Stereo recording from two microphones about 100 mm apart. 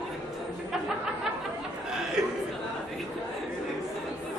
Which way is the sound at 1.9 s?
5° right (ahead or behind).